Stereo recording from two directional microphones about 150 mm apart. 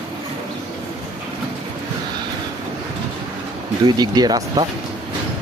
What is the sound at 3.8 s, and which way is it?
Speech, 30° right (ahead or behind).